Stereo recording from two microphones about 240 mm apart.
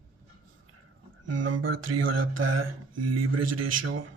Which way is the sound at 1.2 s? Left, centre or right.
Right.